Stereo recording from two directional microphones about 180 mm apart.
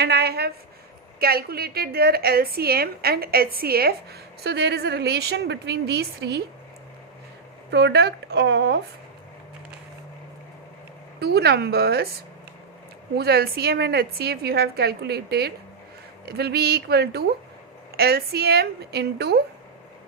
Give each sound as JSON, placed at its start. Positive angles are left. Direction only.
{"t": 0.0, "sound": "a woman's voice", "side_deg": -65}
{"t": 7.7, "sound": "speech", "side_deg": -70}
{"t": 11.2, "sound": "a woman's voice", "side_deg": -65}
{"t": 13.1, "sound": "a woman's voice", "side_deg": -60}